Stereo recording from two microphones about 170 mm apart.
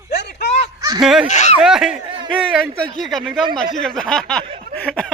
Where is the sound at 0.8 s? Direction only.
20° right (ahead or behind).